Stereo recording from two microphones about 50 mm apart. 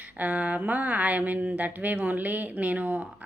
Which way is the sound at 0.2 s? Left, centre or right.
Right.